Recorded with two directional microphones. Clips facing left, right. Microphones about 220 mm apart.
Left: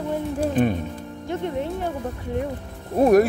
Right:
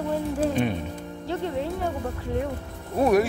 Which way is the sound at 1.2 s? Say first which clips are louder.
Left 1 dB; 15° left (ahead or behind).